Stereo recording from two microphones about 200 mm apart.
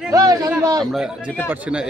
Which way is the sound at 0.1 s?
15° right (ahead or behind).